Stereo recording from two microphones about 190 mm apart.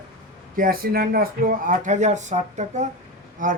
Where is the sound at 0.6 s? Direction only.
50° right (ahead or behind).